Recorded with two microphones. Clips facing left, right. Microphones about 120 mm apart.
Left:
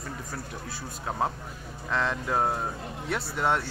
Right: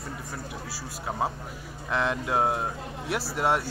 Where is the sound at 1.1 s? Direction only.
5° right (ahead or behind).